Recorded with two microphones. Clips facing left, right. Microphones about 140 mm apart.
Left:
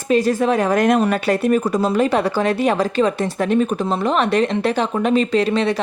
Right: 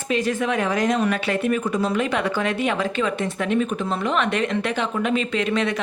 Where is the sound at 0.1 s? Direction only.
35° left (ahead or behind).